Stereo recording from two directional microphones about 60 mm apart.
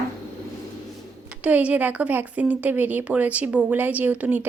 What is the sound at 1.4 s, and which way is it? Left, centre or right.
Speech, right.